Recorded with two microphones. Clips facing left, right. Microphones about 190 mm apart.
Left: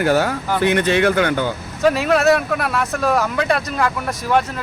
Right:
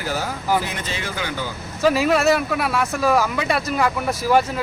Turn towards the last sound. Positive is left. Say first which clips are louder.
# right 1 dB
turn(degrees=-5)  # may be behind; listen again after turning